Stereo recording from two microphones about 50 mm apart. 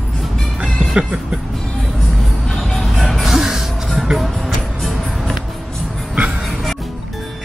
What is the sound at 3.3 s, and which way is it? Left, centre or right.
Music, centre.